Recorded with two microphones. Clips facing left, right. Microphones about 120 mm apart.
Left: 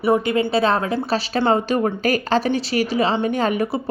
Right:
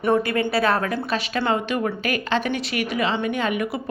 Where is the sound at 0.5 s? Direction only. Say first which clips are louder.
Left 3 dB; 25° left (ahead or behind).